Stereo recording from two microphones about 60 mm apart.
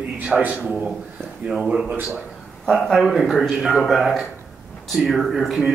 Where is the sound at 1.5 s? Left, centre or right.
Centre.